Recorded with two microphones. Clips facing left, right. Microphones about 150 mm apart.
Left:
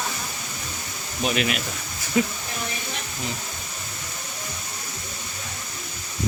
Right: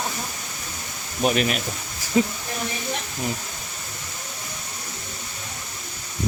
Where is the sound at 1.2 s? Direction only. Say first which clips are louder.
Right 3 dB; 40° right (ahead or behind).